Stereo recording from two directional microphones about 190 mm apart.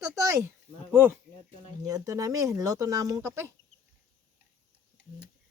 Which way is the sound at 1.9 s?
20° right (ahead or behind).